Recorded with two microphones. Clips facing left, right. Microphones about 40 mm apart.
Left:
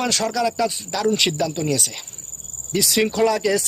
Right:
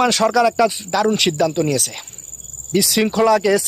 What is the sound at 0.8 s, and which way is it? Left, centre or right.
Speech, right.